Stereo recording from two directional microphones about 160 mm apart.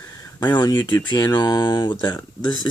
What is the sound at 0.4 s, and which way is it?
Speech, 25° left (ahead or behind).